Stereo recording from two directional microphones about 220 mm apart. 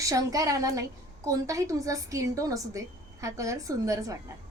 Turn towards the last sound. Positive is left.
turn(degrees=-15)  # may be behind; listen again after turning